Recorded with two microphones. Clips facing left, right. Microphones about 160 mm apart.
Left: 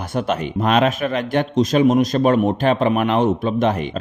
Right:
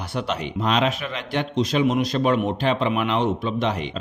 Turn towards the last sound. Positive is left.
turn(degrees=50)  # may be behind; listen again after turning